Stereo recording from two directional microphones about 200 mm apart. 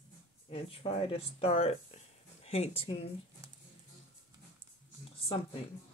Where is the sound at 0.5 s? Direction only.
30° left (ahead or behind).